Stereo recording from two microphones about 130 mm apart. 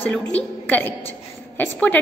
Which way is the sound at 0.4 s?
10° left (ahead or behind).